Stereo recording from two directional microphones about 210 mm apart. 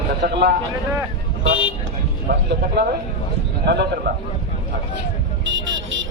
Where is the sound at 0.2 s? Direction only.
50° right (ahead or behind).